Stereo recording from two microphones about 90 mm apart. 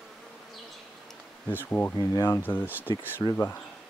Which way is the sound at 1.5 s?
20° left (ahead or behind).